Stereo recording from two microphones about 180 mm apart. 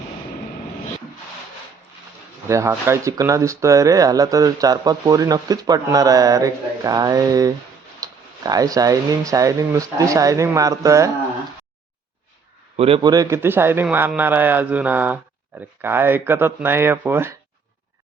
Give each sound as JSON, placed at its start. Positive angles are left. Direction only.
{"t": 2.5, "sound": "speech", "side_deg": -15}
{"t": 12.7, "sound": "a man's voice", "side_deg": -30}